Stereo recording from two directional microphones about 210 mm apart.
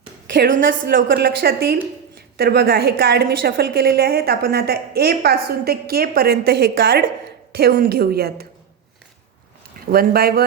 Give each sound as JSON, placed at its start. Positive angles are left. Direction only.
{"t": 0.3, "sound": "a woman's voice", "side_deg": -40}
{"t": 9.9, "sound": "a woman's voice", "side_deg": -45}